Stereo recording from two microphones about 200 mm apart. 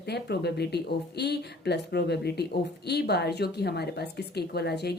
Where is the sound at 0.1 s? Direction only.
55° left (ahead or behind).